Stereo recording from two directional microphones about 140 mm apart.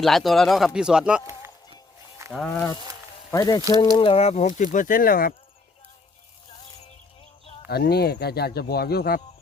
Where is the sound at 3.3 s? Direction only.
25° left (ahead or behind); by 4.6 s 55° left (ahead or behind).